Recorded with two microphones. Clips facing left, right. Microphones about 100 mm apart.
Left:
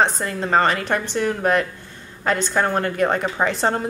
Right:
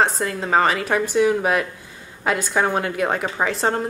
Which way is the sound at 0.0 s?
Centre (ahead or behind).